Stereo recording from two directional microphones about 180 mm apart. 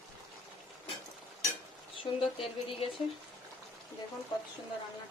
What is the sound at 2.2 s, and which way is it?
Speech, 30° left (ahead or behind).